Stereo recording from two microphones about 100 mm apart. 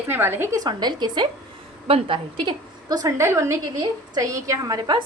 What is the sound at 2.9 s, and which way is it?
Speech, 40° right (ahead or behind).